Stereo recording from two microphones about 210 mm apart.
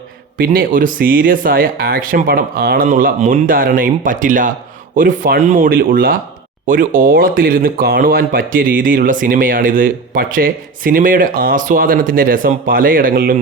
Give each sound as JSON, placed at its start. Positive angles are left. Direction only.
{"t": 0.3, "sound": "speech", "side_deg": -45}